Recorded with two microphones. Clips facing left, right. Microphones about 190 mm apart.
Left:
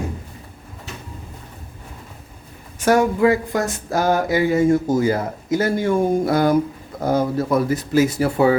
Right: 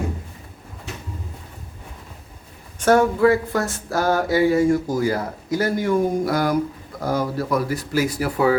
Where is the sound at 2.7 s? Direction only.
10° left (ahead or behind).